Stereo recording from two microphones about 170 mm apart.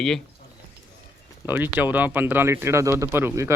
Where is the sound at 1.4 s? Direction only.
10° right (ahead or behind).